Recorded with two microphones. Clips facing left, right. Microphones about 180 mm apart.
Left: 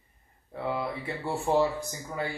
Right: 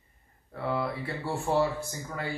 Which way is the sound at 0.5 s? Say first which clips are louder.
Right 1 dB; 15° left (ahead or behind).